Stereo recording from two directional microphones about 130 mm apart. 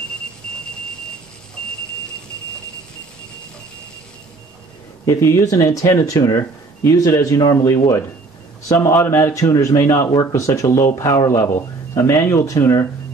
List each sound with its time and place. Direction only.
5.0 s speech: 20° left (ahead or behind)